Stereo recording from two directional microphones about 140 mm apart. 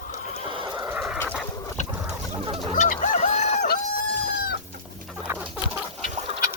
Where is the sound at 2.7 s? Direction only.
60° left (ahead or behind).